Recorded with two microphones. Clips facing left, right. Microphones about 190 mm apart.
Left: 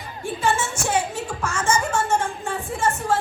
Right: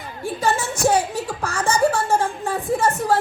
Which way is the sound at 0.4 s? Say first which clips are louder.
Right 4 dB; 35° right (ahead or behind).